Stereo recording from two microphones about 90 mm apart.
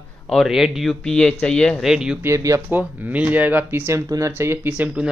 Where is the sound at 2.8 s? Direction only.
15° right (ahead or behind).